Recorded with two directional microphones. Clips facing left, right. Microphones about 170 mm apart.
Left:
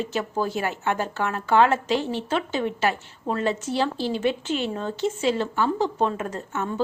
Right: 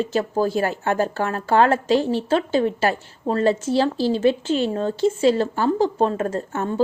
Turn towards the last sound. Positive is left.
turn(degrees=-35)  # may be behind; listen again after turning